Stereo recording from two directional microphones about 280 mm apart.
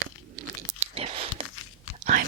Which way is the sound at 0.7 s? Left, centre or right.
Right.